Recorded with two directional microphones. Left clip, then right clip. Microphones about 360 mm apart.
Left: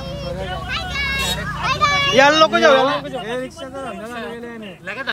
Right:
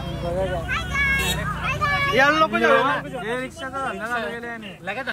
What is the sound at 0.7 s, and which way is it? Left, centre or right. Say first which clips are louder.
Vehicle: even; centre.